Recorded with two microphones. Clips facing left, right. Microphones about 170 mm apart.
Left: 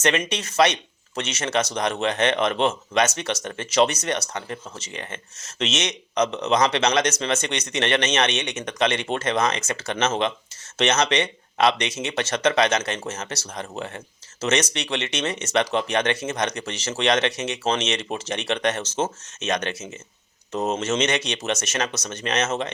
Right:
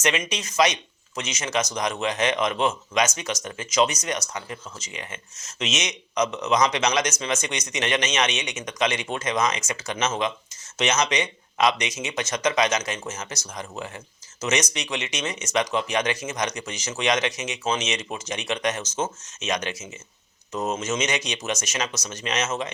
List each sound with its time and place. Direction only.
0.3 s speech: 55° left (ahead or behind)
5.4 s speech: 60° left (ahead or behind)
14.4 s speech: 60° left (ahead or behind)